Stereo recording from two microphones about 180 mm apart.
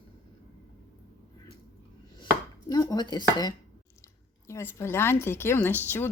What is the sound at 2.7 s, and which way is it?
Speech, 20° left (ahead or behind).